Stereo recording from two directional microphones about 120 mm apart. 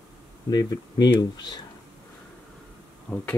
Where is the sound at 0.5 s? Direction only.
35° left (ahead or behind).